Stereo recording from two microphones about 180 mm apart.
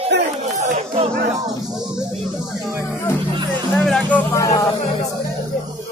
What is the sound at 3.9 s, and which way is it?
Music, 5° left (ahead or behind).